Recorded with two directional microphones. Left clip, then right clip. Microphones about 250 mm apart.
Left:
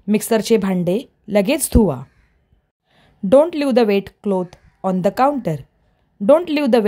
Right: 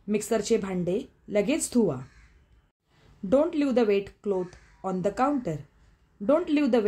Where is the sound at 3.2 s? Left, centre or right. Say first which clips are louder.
Left 10 dB; left.